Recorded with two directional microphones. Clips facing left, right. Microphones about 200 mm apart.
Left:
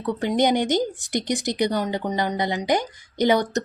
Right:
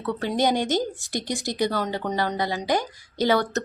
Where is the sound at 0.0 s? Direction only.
15° left (ahead or behind).